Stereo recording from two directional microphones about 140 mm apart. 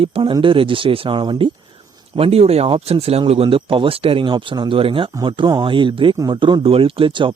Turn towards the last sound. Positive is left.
turn(degrees=-35)  # may be behind; listen again after turning